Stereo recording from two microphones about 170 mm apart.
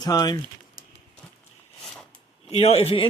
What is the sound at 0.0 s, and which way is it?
Speech, 25° left (ahead or behind).